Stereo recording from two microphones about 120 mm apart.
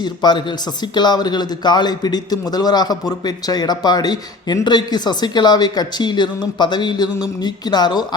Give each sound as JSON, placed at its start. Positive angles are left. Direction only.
{"t": 0.0, "sound": "speech", "side_deg": 40}